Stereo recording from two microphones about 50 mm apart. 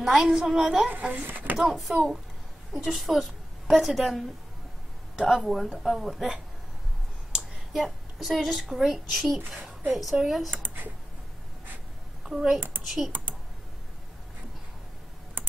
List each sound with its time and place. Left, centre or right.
0.0 s a woman's voice: centre
0.8 s speech: right
1.6 s a woman's voice: centre
5.3 s a woman's voice: centre
7.7 s a woman's voice: centre
10.6 s speech: right
12.3 s a child's voice: centre
12.5 s a child's voice: right
12.8 s a woman's voice: centre